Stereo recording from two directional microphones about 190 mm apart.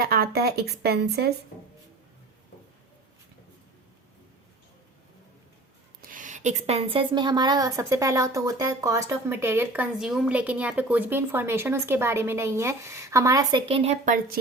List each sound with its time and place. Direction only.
0.0 s speech: 55° right (ahead or behind)
6.0 s a woman's voice: 45° right (ahead or behind); by 13.9 s 30° right (ahead or behind)
14.0 s a woman's voice: 45° right (ahead or behind)